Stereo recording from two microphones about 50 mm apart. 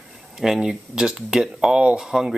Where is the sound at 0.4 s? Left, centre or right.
Centre.